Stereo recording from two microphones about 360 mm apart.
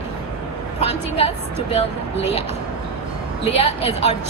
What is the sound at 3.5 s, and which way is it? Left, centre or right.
Speech, centre.